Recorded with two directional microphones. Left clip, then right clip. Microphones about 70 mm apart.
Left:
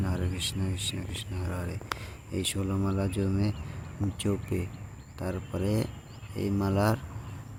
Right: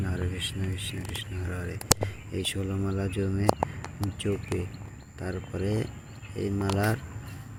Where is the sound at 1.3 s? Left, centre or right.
Centre.